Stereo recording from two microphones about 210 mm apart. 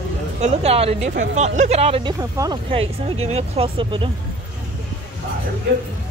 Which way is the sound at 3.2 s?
30° right (ahead or behind).